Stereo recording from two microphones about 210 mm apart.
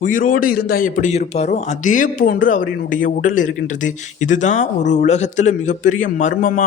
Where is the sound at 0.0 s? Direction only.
40° left (ahead or behind).